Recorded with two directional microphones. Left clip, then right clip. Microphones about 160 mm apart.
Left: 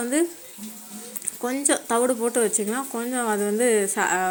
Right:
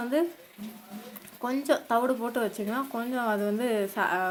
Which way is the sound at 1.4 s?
20° left (ahead or behind).